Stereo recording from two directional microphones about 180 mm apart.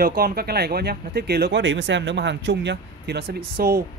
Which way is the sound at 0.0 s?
55° right (ahead or behind).